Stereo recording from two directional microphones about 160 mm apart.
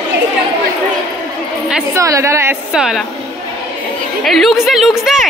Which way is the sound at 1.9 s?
20° right (ahead or behind).